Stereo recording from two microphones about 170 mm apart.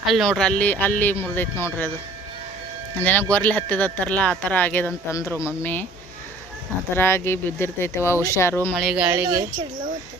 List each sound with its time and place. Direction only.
0.1 s speech: centre (ahead or behind)
3.0 s speech: 10° left (ahead or behind)
6.9 s speech: 15° left (ahead or behind)
8.8 s speech: 5° right (ahead or behind); by 9.6 s 20° right (ahead or behind)